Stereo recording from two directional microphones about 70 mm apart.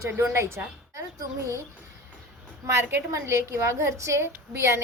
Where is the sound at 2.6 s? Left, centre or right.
Right.